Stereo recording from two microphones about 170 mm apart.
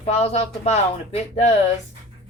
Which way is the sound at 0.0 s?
40° left (ahead or behind).